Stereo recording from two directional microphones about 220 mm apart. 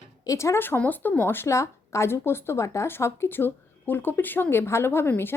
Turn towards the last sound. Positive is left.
turn(degrees=10)  # may be behind; listen again after turning